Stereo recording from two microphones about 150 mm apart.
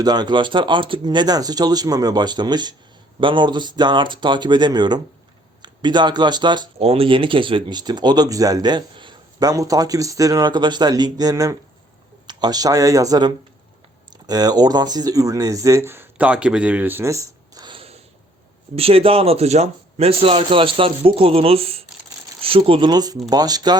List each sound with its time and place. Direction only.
0.0 s a man's voice: 30° right (ahead or behind)
6.7 s a man's voice: 40° right (ahead or behind)